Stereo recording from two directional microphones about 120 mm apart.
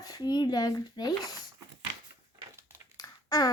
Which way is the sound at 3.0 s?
35° left (ahead or behind).